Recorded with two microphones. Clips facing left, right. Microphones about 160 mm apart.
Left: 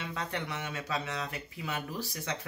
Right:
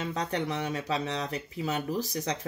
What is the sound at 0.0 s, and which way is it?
Speech, 35° right (ahead or behind).